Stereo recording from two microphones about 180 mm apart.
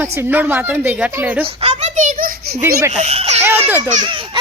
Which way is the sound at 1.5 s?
35° right (ahead or behind).